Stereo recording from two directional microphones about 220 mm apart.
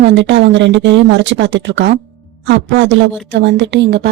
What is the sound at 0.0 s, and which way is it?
A woman's voice, 55° right (ahead or behind).